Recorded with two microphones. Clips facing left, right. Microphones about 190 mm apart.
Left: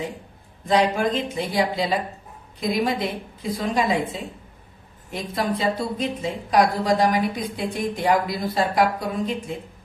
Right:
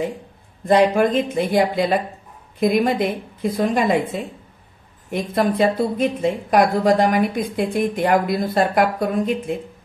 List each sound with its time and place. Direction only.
0.7 s speech: 55° right (ahead or behind)